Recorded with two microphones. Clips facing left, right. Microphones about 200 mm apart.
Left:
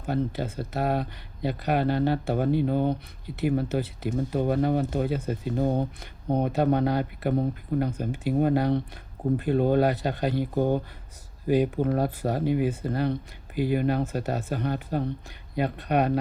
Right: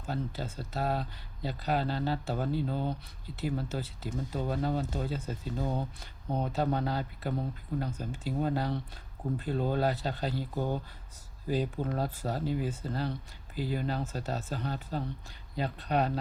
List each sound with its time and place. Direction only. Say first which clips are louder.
0.0 s speech: left 8 dB; 60° left (ahead or behind)
11.4 s speech: left 8 dB; 65° left (ahead or behind)